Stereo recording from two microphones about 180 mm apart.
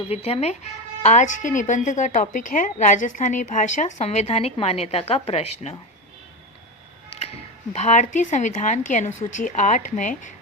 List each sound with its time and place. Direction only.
0.1 s a woman's voice: 35° left (ahead or behind)
7.7 s speech: 40° left (ahead or behind)